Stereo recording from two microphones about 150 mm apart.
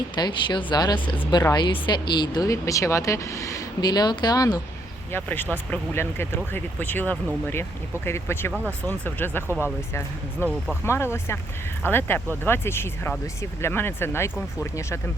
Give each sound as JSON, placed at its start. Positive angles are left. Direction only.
{"t": 0.2, "sound": "speech", "side_deg": 30}
{"t": 5.1, "sound": "speech", "side_deg": 15}
{"t": 9.5, "sound": "speech", "side_deg": -15}
{"t": 10.4, "sound": "speech", "side_deg": 15}